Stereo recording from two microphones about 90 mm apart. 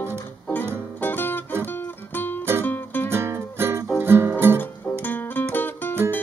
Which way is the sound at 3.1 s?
30° right (ahead or behind).